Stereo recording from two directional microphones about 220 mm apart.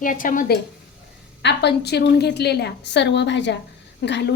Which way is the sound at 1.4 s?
50° left (ahead or behind).